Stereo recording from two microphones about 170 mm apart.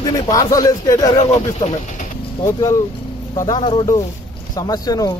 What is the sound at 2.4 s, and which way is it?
Speech, 20° left (ahead or behind).